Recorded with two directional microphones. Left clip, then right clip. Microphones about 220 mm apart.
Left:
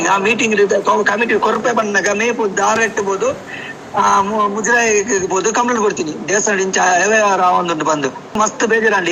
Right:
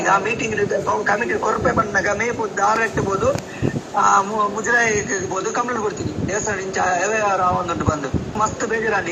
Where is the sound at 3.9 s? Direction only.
30° left (ahead or behind).